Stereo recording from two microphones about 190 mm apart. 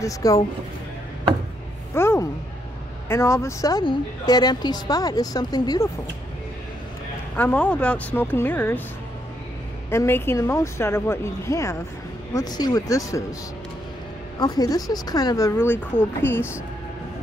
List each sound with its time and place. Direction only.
0.0 s speech: 15° left (ahead or behind)
2.0 s a sound: 15° left (ahead or behind)
3.1 s a woman's voice: 15° left (ahead or behind)
7.3 s speech: 10° left (ahead or behind)
9.8 s a woman's voice: 10° left (ahead or behind)
14.4 s speech: 20° left (ahead or behind)